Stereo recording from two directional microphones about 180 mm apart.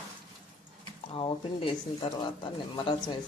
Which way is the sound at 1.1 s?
30° left (ahead or behind).